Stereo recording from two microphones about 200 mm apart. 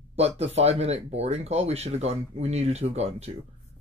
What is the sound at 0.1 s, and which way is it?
Speech, 30° right (ahead or behind).